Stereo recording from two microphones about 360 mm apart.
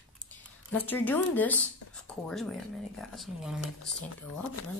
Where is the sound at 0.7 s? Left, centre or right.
Centre.